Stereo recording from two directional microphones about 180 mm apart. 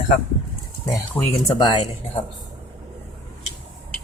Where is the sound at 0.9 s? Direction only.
20° left (ahead or behind).